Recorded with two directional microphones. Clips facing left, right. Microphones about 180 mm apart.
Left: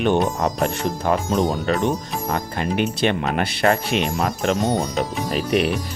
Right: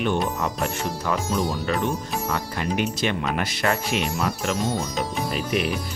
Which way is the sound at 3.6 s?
30° left (ahead or behind).